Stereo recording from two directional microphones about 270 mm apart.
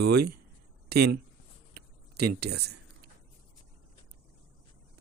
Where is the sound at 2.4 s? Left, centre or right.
Right.